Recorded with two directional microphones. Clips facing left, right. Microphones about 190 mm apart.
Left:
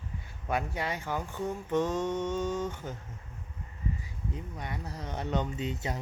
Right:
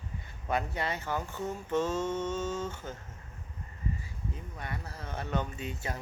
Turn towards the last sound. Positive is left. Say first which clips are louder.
# left 4 dB
turn(degrees=20)  # may be behind; listen again after turning